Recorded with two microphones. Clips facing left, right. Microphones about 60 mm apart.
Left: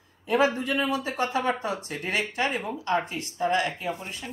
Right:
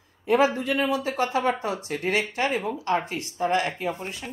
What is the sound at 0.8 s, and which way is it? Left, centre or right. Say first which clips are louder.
Speech: right 2 dB; left.